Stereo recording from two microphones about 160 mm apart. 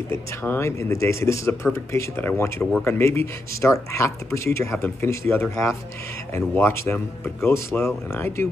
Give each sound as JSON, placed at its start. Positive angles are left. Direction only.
{"t": 0.1, "sound": "speech", "side_deg": 15}